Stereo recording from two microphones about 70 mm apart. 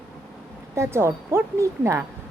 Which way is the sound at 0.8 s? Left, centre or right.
Right.